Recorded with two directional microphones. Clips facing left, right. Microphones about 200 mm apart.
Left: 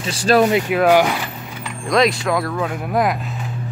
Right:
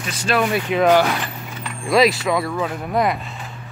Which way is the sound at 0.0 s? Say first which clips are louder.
Left 6 dB; 35° left (ahead or behind).